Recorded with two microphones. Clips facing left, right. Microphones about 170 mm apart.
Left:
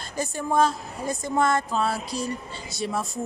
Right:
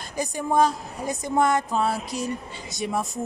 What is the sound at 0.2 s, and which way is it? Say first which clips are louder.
Speech: right 1 dB; 15° right (ahead or behind).